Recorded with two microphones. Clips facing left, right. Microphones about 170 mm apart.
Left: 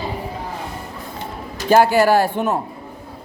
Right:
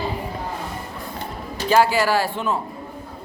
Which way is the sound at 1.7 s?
55° left (ahead or behind).